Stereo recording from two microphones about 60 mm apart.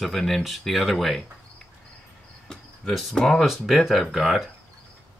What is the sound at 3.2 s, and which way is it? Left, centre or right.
Speech, centre.